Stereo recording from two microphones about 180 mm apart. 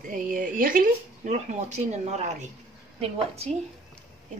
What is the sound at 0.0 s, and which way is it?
Speech, 50° right (ahead or behind).